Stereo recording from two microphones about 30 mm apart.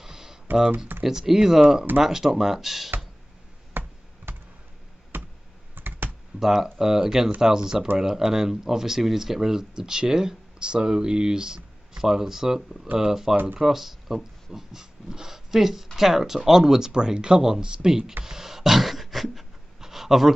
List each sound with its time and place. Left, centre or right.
0.0 s computer keyboard: centre
0.7 s speech: centre
6.4 s speech: centre; by 17.4 s right
17.4 s speech: centre
18.2 s beatboxing: centre
19.8 s a sound: centre